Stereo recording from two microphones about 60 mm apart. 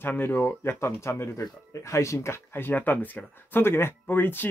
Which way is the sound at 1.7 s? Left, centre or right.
Left.